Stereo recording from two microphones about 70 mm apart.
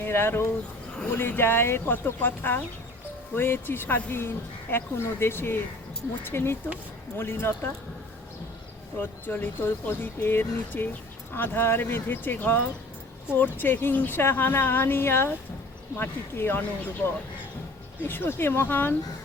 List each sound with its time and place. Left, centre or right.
0.0 s a woman's voice: left
9.0 s a woman's voice: left